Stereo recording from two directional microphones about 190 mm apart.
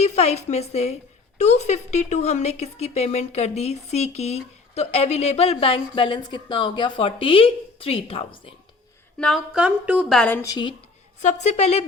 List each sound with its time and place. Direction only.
0.0 s a woman's voice: 35° left (ahead or behind)
9.1 s a woman's voice: centre (ahead or behind)
10.2 s a woman's voice: 10° left (ahead or behind)
11.2 s speech: 35° left (ahead or behind)